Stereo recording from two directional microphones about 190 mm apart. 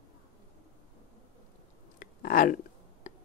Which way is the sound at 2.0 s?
45° left (ahead or behind).